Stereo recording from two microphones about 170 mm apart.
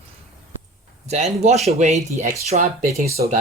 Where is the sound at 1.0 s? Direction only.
40° right (ahead or behind).